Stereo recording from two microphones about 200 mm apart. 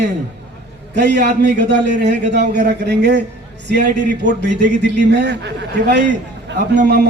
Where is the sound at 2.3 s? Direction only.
60° right (ahead or behind).